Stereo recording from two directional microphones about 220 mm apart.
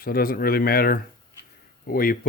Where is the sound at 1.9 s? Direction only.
40° left (ahead or behind).